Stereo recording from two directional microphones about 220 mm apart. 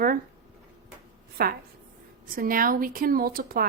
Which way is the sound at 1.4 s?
45° right (ahead or behind).